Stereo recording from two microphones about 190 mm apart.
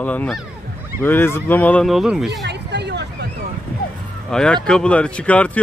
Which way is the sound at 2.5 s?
65° right (ahead or behind).